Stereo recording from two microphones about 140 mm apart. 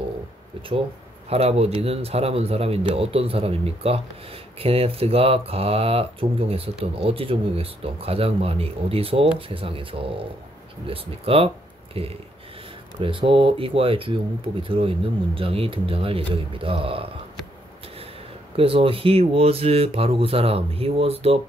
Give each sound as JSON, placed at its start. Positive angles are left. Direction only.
{"t": 0.6, "sound": "speech", "side_deg": -40}
{"t": 18.6, "sound": "speech", "side_deg": -40}